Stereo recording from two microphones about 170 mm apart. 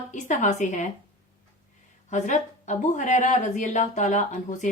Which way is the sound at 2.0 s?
45° left (ahead or behind).